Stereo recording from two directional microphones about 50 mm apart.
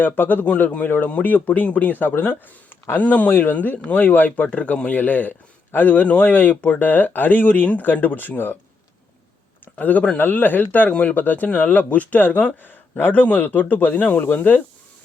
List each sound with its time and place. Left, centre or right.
0.0 s a man's voice: left
3.0 s a man's voice: left
9.7 s speech: left
10.2 s a man's voice: left